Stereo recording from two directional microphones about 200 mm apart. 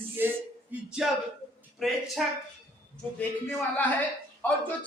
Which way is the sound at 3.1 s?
10° left (ahead or behind).